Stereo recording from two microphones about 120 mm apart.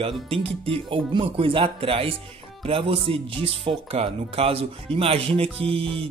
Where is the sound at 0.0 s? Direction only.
55° right (ahead or behind).